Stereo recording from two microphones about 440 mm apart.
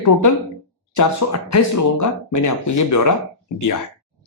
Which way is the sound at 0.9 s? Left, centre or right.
Left.